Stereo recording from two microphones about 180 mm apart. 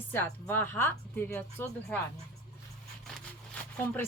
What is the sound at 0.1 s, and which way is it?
Speech, 10° left (ahead or behind).